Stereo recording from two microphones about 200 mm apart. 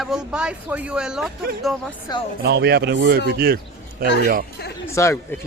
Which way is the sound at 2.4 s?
55° right (ahead or behind).